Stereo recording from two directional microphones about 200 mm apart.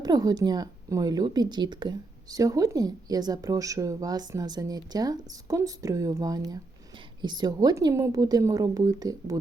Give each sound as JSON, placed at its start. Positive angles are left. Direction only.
{"t": 0.0, "sound": "a woman's voice", "side_deg": -20}